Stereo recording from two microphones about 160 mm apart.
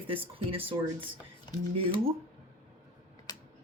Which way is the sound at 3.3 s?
25° left (ahead or behind).